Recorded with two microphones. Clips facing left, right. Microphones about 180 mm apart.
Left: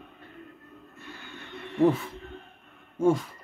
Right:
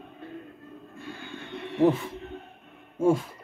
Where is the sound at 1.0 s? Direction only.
30° right (ahead or behind).